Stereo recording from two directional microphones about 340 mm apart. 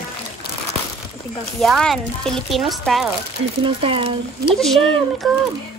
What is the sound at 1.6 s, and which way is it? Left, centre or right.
Speech, centre.